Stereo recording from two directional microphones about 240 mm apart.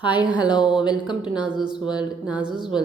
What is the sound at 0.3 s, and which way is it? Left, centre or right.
Speech, centre.